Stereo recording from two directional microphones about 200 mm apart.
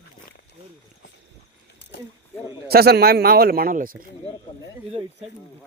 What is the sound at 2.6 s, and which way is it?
A man's voice, 50° right (ahead or behind).